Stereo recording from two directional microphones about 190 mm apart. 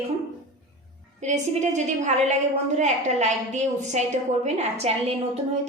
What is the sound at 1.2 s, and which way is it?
A woman's voice, 40° right (ahead or behind).